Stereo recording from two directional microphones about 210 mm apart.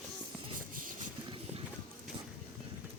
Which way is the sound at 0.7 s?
40° right (ahead or behind).